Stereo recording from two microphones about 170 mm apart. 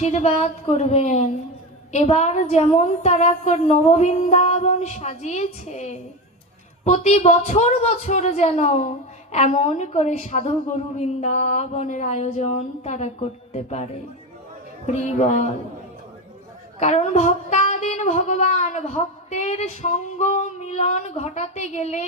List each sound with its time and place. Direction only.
0.0 s a man's voice: 40° left (ahead or behind)
16.8 s speech: 40° left (ahead or behind)